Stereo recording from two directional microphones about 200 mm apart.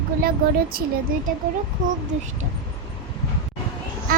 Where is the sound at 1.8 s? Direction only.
40° right (ahead or behind).